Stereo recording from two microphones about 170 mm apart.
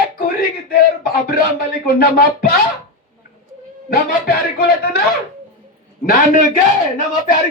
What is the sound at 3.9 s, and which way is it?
Speech, 60° left (ahead or behind).